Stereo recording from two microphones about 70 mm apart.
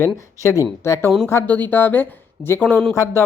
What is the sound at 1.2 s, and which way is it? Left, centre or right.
A woman's voice, left.